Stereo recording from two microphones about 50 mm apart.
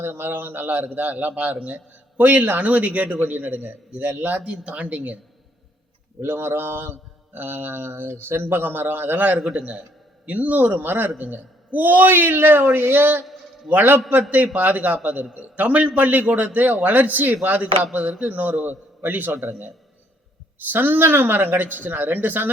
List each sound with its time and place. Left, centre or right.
0.0 s a man's voice: right
6.2 s speech: right
9.4 s a man's voice: centre
10.2 s a man's voice: right